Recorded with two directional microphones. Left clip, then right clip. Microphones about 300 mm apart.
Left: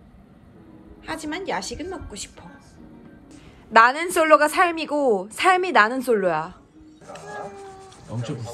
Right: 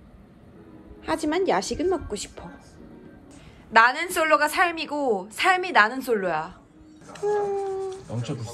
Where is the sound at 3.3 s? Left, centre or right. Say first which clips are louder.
Left 3 dB; centre.